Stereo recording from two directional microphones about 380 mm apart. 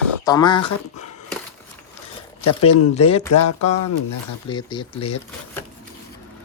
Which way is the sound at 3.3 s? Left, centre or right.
Left.